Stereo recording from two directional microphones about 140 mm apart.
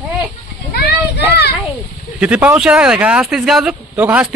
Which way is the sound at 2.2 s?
10° right (ahead or behind).